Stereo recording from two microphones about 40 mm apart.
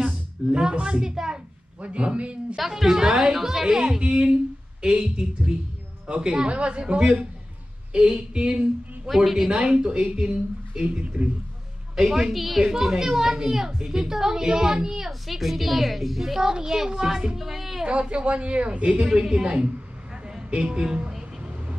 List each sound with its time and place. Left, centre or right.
0.0 s a sound: right
0.7 s a woman's voice: right
1.8 s a man's voice: right
2.5 s a woman's voice: centre
4.0 s a man's voice: right
8.4 s a sound: right
9.1 s a woman's voice: centre
9.5 s a man's voice: right
11.9 s a woman's voice: centre
16.4 s a woman's voice: centre
17.8 s a man's voice: right